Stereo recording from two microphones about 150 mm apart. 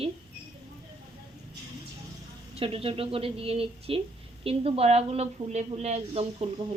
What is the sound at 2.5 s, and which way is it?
A woman's voice, 40° right (ahead or behind).